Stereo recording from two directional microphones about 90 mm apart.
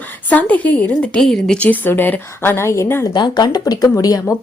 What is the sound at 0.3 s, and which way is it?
Speech, 15° left (ahead or behind).